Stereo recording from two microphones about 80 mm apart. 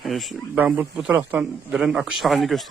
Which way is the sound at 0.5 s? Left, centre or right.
Right.